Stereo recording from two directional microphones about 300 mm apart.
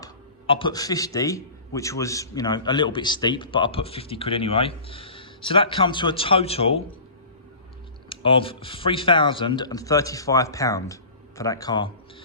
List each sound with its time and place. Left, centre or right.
0.0 s speech: centre
8.1 s speech: centre